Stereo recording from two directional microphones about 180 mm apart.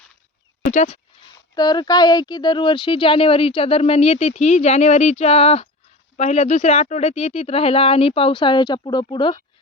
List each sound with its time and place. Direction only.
0.7 s speech: 40° left (ahead or behind)
1.5 s speech: 25° left (ahead or behind)